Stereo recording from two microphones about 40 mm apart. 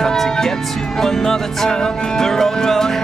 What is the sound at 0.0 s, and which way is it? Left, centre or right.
Music, centre.